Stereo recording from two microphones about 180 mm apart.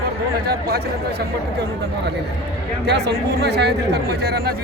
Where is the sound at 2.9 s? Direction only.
70° right (ahead or behind).